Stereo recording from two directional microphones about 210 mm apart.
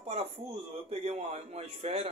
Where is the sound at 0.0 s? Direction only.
30° right (ahead or behind).